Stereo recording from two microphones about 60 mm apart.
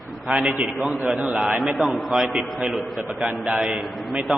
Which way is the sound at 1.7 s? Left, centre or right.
Centre.